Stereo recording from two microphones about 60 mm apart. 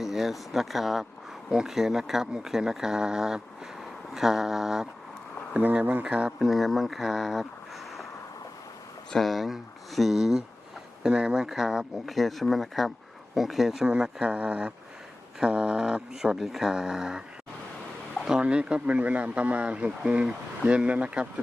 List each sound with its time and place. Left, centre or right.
0.0 s speech: centre
5.8 s speech: right
6.1 s speech: centre
6.4 s speech: centre
9.0 s speech: centre
11.4 s speech: centre
13.8 s speech: centre
18.3 s speech: centre